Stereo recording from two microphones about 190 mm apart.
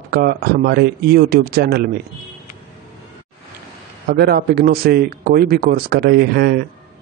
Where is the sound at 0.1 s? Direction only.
55° right (ahead or behind).